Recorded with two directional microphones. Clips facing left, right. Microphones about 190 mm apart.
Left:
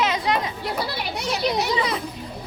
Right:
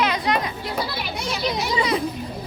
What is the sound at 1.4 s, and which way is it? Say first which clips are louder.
Speech: left 1 dB; 65° left (ahead or behind).